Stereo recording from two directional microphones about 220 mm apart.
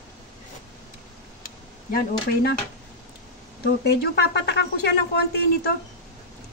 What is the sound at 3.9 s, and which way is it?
A woman's voice, 50° left (ahead or behind).